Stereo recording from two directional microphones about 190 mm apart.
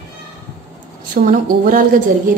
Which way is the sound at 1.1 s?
45° right (ahead or behind).